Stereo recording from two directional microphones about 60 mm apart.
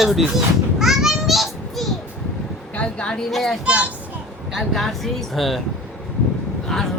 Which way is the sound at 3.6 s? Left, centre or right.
Right.